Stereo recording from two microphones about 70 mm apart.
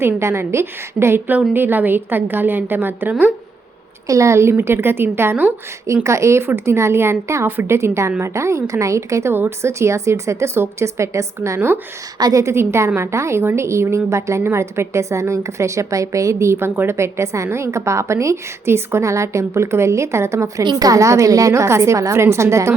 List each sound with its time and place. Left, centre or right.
0.0 s a woman's voice: right
4.0 s speech: right
5.8 s a woman's voice: right
9.3 s speech: right
12.2 s a woman's voice: right
20.7 s a woman's voice: right